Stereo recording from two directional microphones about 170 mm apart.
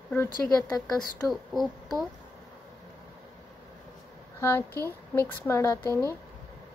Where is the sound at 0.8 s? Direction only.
Centre (ahead or behind).